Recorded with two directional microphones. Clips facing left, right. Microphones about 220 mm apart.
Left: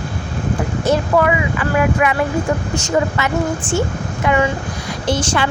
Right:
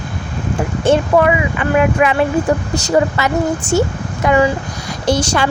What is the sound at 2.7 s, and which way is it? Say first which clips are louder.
Speech: right 3 dB; 35° right (ahead or behind).